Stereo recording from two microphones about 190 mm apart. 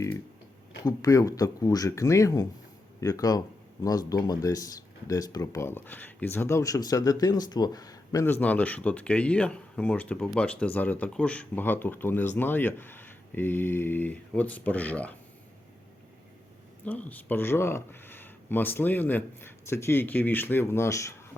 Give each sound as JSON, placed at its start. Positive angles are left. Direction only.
{"t": 0.9, "sound": "speech", "side_deg": 20}
{"t": 16.8, "sound": "speech", "side_deg": 10}